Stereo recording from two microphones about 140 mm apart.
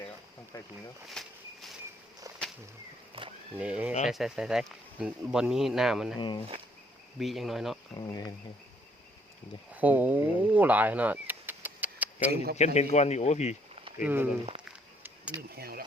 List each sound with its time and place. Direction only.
1.2 s insect: 5° left (ahead or behind)
3.1 s a sound: 40° right (ahead or behind)
3.6 s speech: 10° right (ahead or behind)
6.1 s speech: 35° left (ahead or behind)
7.2 s speech: centre (ahead or behind)
7.9 s speech: 25° left (ahead or behind)
9.7 s speech: 10° right (ahead or behind)
12.5 s speech: 55° left (ahead or behind)
14.0 s speech: 15° right (ahead or behind)
15.5 s speech: 90° right